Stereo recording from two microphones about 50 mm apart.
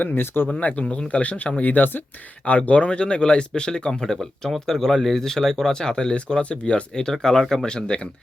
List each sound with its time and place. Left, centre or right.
0.0 s speech: left
0.6 s speech: left
2.5 s speech: left